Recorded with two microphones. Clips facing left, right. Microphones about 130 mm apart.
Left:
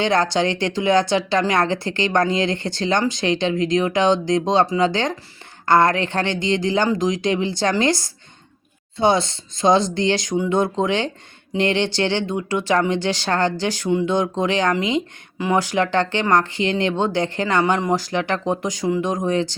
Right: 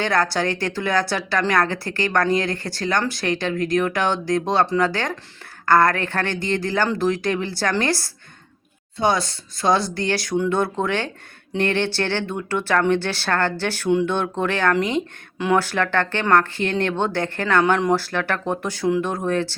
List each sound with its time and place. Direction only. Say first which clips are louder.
0.0 s speech: left 2 dB; 20° left (ahead or behind)